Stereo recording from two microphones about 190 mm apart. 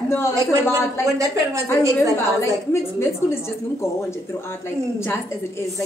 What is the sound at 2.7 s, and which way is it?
A woman's voice, 15° left (ahead or behind).